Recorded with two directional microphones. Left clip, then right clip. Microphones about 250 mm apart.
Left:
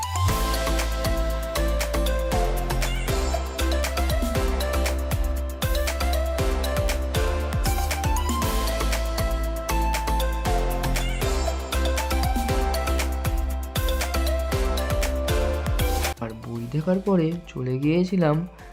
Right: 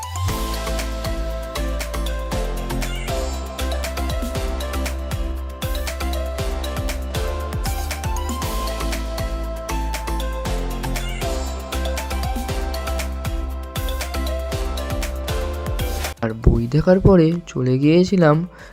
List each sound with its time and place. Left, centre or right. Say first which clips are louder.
3.7 s music: left 1 dB; centre
5.8 s music: left 1 dB; centre
9.6 s music: left 3 dB; centre
11.9 s music: left 1 dB; centre
14.3 s music: even; centre
16.7 s speech: right 9 dB; right